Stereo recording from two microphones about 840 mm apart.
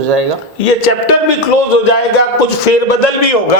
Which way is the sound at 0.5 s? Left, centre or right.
Left.